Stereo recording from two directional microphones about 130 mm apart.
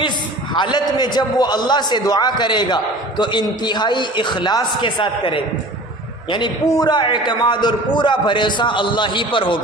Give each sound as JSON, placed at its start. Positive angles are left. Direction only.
{"t": 0.5, "sound": "a man's voice", "side_deg": 35}